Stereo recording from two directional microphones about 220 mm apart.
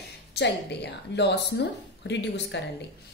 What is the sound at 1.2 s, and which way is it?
Speech, 50° left (ahead or behind).